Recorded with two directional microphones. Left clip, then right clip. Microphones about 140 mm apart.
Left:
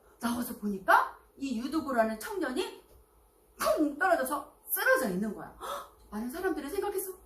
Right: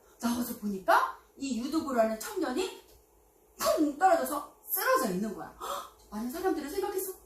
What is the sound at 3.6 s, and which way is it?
Speech, 45° right (ahead or behind).